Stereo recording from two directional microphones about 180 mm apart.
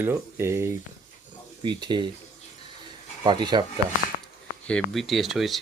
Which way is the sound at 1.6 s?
25° right (ahead or behind).